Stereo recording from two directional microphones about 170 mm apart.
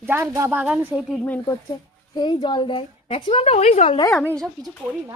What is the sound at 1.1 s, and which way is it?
Speech, 10° left (ahead or behind).